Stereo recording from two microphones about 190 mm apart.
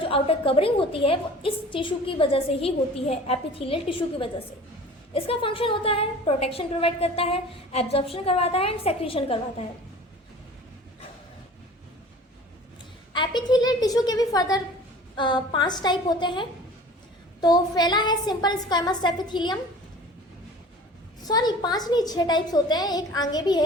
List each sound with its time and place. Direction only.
0.0 s a woman's voice: 30° left (ahead or behind)
13.1 s a woman's voice: 20° left (ahead or behind)
21.2 s a woman's voice: 20° left (ahead or behind)